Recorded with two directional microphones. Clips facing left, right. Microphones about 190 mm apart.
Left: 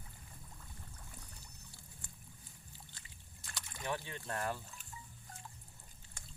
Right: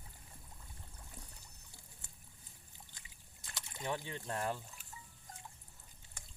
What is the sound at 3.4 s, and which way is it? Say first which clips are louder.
Trickle: right 1 dB; 20° right (ahead or behind).